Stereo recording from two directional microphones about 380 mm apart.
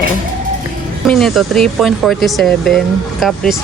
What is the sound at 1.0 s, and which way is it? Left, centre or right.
Speech, centre.